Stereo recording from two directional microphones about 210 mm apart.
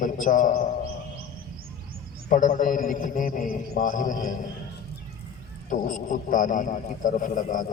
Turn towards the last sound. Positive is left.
turn(degrees=40)  # may be behind; listen again after turning